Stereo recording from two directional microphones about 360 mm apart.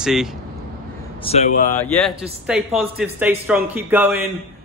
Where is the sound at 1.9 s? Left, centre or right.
Centre.